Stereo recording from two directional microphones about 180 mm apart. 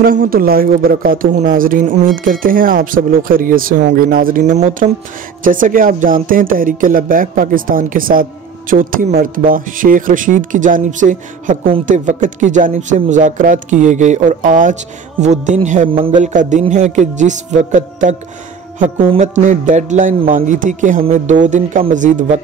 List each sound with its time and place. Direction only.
0.0 s speech: 55° right (ahead or behind)